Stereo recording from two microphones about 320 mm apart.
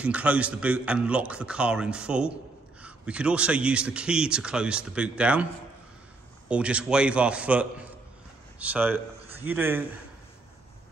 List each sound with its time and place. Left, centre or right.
0.0 s a man's voice: centre
6.5 s a man's voice: centre